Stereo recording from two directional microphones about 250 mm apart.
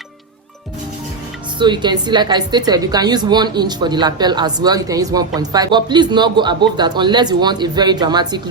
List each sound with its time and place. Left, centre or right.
1.5 s a woman's voice: centre